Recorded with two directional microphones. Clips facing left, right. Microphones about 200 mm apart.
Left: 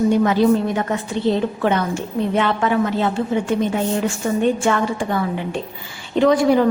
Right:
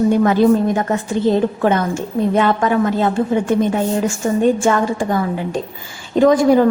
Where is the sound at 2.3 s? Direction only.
45° right (ahead or behind).